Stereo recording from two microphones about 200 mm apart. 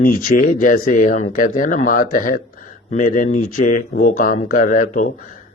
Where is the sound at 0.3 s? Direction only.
40° left (ahead or behind).